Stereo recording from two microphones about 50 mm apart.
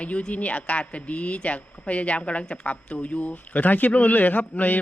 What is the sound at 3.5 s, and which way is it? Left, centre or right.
Speech, left.